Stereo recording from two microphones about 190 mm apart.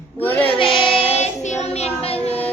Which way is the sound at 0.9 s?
30° left (ahead or behind).